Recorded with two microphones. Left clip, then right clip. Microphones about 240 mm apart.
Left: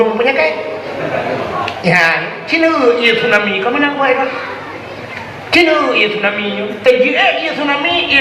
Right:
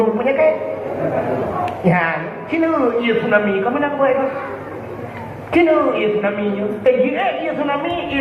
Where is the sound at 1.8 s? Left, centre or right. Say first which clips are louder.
Left 8 dB; left.